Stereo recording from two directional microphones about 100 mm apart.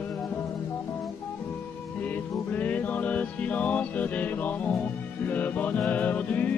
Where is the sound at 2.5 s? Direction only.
15° left (ahead or behind).